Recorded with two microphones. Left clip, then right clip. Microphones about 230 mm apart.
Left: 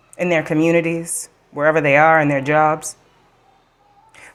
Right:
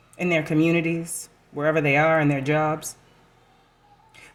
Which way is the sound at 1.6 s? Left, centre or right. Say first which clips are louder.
Left 7 dB; centre.